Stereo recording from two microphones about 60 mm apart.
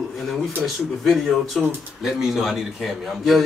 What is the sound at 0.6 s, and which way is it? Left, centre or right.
A man's voice, centre.